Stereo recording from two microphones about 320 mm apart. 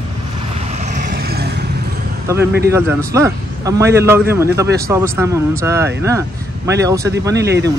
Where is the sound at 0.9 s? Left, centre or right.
Right.